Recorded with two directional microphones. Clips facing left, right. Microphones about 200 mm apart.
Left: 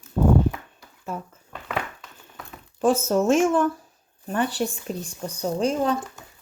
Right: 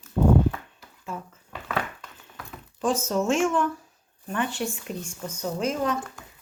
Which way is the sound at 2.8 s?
45° left (ahead or behind).